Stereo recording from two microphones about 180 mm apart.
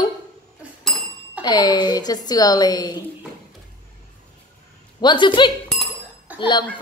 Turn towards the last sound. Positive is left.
turn(degrees=25)  # may be behind; listen again after turning